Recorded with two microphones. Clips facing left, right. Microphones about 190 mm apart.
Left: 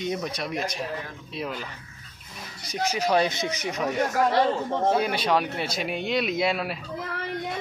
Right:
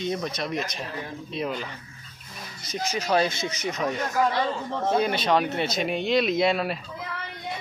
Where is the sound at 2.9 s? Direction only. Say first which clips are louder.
Even; 15° left (ahead or behind).